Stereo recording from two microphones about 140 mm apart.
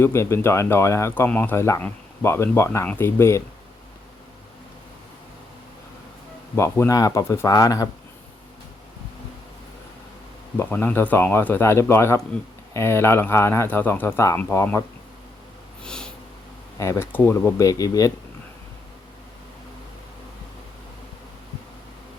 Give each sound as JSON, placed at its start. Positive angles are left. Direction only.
{"t": 0.0, "sound": "speech", "side_deg": 20}
{"t": 6.6, "sound": "speech", "side_deg": 20}
{"t": 10.6, "sound": "speech", "side_deg": 15}
{"t": 15.8, "sound": "sniff", "side_deg": 5}
{"t": 16.7, "sound": "speech", "side_deg": 20}